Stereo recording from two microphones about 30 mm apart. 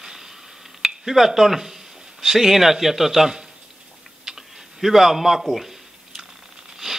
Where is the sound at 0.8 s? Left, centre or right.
Centre.